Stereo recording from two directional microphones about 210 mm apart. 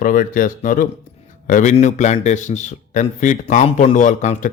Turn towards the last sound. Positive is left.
turn(degrees=35)  # may be behind; listen again after turning